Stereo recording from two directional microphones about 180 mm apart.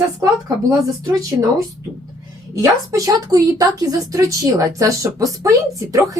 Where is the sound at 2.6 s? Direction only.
20° right (ahead or behind).